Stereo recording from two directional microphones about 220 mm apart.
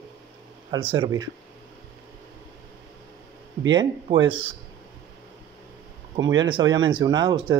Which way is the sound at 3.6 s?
20° right (ahead or behind).